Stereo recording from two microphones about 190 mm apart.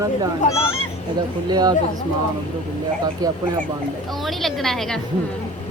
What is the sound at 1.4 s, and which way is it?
Speech, 20° right (ahead or behind).